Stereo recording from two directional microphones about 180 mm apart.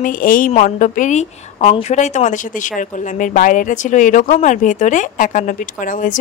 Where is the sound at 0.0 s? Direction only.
50° left (ahead or behind).